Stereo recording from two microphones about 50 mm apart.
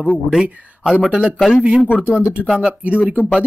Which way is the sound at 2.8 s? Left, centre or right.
Right.